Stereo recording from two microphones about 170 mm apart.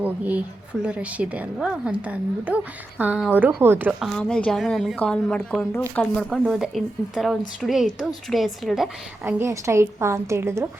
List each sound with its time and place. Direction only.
0.0 s a woman's voice: 10° right (ahead or behind)
4.1 s speech: 5° left (ahead or behind)
9.2 s a woman's voice: 15° right (ahead or behind)